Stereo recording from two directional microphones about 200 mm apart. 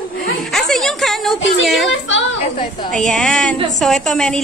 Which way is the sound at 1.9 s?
65° left (ahead or behind).